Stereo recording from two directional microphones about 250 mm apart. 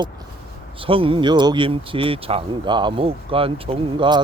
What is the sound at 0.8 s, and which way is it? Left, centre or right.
Speech, right.